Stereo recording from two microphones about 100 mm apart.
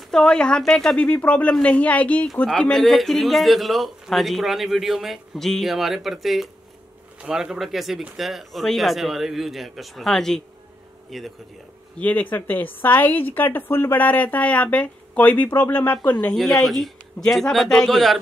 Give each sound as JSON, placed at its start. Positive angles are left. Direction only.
{"t": 0.1, "sound": "a woman's voice", "side_deg": 5}
{"t": 12.0, "sound": "a woman's voice", "side_deg": 15}
{"t": 16.3, "sound": "a woman's voice", "side_deg": 5}